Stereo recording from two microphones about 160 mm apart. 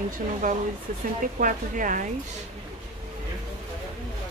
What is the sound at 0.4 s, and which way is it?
Speech, 55° right (ahead or behind).